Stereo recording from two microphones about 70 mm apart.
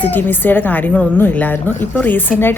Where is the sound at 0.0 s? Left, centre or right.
Left.